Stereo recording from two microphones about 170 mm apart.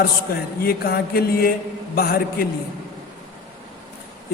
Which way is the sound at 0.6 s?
65° left (ahead or behind).